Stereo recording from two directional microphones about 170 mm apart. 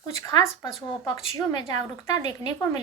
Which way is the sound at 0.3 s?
20° left (ahead or behind).